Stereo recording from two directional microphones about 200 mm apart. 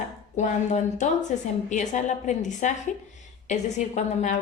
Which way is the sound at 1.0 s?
35° left (ahead or behind).